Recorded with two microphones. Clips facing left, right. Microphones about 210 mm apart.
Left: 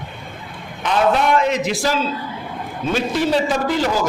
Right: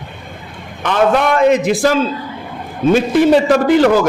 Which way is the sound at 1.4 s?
55° right (ahead or behind).